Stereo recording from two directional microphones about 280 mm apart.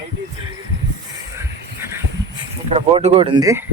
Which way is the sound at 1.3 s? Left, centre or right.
Centre.